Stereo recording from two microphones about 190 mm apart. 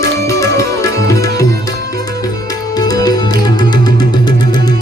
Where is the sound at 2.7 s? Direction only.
20° left (ahead or behind).